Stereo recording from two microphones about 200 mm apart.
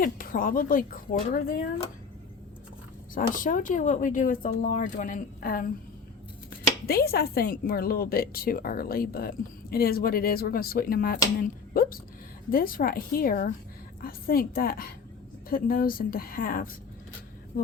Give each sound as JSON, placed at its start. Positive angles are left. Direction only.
{"t": 0.0, "sound": "a woman's voice", "side_deg": 45}
{"t": 3.2, "sound": "speech", "side_deg": 40}
{"t": 6.8, "sound": "a woman's voice", "side_deg": 50}